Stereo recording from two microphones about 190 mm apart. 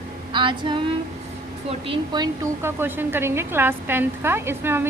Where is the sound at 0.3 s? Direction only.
25° right (ahead or behind).